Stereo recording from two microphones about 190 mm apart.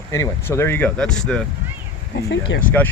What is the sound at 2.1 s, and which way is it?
Speech, 70° left (ahead or behind).